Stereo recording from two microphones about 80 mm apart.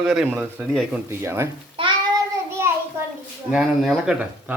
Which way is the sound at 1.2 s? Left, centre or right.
Right.